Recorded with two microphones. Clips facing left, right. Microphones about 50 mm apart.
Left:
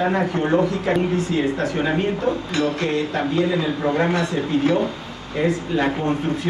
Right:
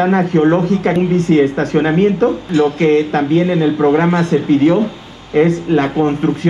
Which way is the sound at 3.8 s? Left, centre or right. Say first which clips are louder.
Right 9 dB; right.